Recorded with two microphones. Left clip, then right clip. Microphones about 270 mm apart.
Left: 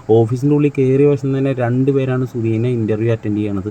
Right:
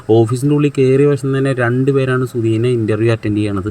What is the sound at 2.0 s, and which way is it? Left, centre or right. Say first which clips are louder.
Speech: right 3 dB; right.